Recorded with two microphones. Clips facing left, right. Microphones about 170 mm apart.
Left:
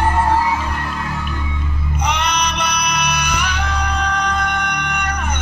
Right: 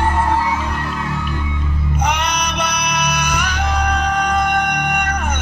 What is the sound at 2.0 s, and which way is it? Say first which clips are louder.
Music: left 1 dB; 50° right (ahead or behind).